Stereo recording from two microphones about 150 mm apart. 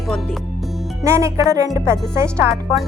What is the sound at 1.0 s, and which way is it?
Speech, 20° right (ahead or behind).